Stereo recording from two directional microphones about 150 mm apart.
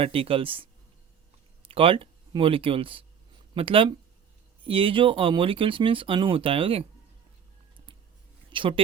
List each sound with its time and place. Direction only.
0.0 s speech: 40° right (ahead or behind)
8.4 s a woman's voice: 35° right (ahead or behind)